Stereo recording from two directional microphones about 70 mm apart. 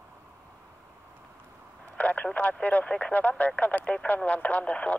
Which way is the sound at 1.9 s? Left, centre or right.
Centre.